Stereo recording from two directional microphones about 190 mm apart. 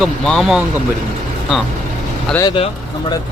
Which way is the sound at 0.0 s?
Centre (ahead or behind).